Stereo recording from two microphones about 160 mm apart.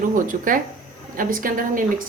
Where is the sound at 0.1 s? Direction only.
55° right (ahead or behind).